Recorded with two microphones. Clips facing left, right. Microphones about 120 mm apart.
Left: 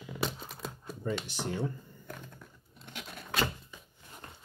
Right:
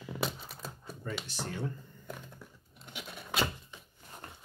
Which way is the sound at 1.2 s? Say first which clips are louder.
Left 3 dB; 15° left (ahead or behind).